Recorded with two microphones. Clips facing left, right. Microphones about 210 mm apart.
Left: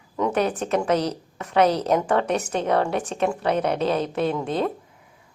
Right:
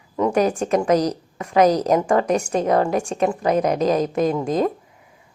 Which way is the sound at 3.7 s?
40° right (ahead or behind).